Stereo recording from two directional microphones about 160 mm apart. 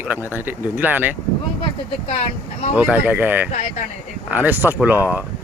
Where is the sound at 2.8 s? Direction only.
10° right (ahead or behind).